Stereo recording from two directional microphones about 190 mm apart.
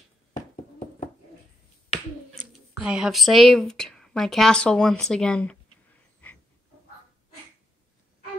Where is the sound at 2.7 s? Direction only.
5° right (ahead or behind).